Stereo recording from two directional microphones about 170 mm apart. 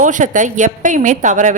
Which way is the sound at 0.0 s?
45° right (ahead or behind).